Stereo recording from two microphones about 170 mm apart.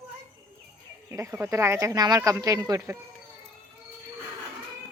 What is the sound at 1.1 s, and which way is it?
Speech, 15° right (ahead or behind).